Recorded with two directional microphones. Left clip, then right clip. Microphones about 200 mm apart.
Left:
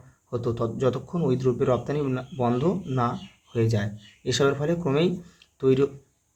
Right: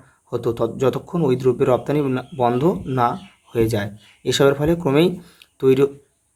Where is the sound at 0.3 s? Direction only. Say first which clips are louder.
Right 6 dB; 30° right (ahead or behind).